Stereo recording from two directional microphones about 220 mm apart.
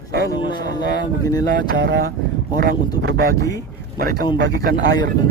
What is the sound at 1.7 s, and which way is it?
Speech, 50° right (ahead or behind).